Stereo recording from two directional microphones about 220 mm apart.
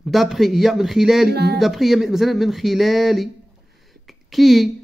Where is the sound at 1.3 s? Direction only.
45° right (ahead or behind).